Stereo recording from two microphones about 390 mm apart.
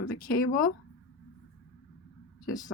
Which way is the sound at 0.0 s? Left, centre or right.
Left.